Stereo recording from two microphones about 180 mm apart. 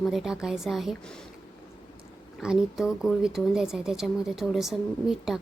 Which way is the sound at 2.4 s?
5° right (ahead or behind).